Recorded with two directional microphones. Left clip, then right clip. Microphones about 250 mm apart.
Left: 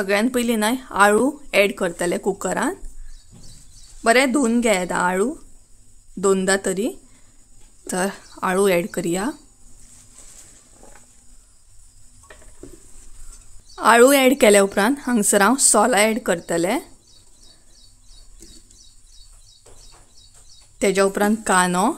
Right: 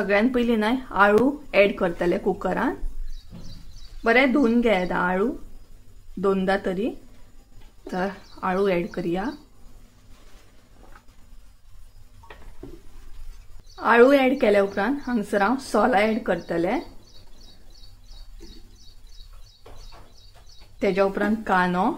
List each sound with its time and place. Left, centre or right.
0.0 s speech: left
4.0 s speech: left
13.7 s a woman's voice: left
20.8 s a woman's voice: left